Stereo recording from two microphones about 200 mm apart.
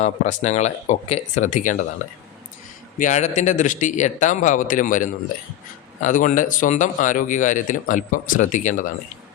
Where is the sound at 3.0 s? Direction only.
35° left (ahead or behind).